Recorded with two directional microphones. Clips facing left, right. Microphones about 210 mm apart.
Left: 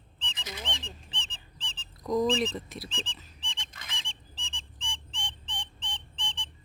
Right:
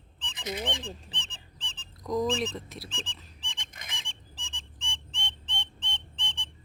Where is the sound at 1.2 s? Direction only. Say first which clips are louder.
Left 1 dB; 60° right (ahead or behind).